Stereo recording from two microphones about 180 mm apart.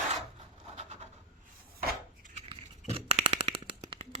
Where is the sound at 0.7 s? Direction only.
40° right (ahead or behind).